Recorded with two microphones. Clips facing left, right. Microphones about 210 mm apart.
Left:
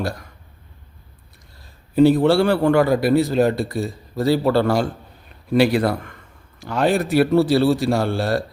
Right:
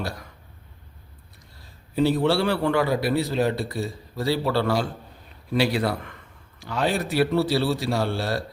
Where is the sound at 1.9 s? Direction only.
50° left (ahead or behind).